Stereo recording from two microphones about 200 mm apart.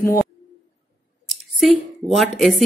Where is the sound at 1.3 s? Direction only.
Centre (ahead or behind).